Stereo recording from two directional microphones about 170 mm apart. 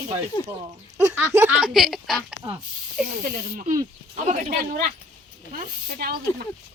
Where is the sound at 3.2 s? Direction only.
50° right (ahead or behind).